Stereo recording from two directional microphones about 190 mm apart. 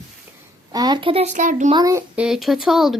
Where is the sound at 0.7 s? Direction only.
20° right (ahead or behind); by 1.7 s 40° right (ahead or behind).